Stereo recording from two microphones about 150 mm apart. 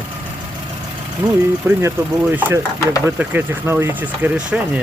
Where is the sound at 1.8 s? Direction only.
15° right (ahead or behind).